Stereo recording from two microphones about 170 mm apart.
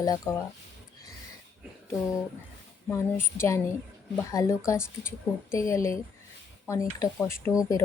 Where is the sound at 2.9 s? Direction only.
15° left (ahead or behind).